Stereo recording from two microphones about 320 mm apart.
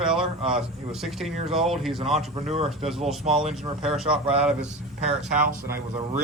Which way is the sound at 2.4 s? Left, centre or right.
Centre.